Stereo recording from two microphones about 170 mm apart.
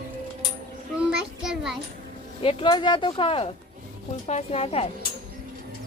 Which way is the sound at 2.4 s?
35° left (ahead or behind).